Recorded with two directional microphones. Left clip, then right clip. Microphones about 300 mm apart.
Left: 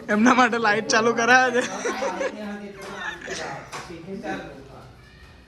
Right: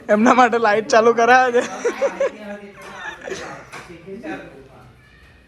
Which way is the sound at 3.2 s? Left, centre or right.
Centre.